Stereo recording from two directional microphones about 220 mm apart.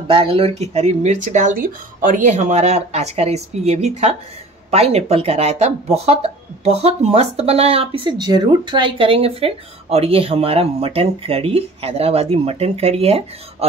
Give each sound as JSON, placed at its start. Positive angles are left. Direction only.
{"t": 0.1, "sound": "speech", "side_deg": -25}